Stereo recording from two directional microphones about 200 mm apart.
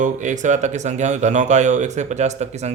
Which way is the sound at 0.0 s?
35° right (ahead or behind).